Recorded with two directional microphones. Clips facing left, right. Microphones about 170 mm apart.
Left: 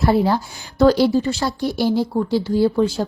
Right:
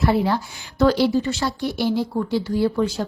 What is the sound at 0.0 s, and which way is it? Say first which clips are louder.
A woman's voice: left 3 dB; 35° left (ahead or behind).